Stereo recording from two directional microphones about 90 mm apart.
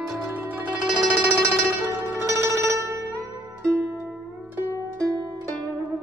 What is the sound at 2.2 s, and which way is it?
Zither, 35° right (ahead or behind).